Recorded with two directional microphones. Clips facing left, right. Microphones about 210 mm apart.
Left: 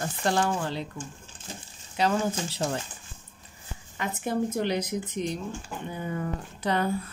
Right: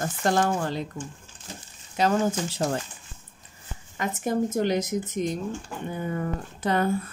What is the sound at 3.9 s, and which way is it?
Speech, 45° right (ahead or behind).